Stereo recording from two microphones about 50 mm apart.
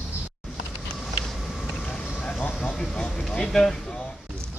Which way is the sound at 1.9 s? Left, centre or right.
Centre.